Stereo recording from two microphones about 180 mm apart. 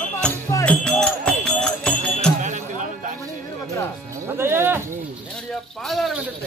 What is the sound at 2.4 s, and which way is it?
Music, 40° right (ahead or behind).